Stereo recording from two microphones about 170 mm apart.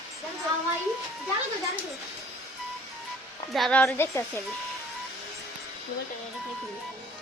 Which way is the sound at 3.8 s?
15° left (ahead or behind).